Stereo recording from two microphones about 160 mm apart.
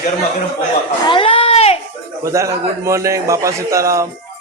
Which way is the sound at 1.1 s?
35° left (ahead or behind).